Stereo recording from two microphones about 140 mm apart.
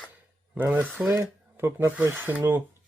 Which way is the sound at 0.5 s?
15° right (ahead or behind).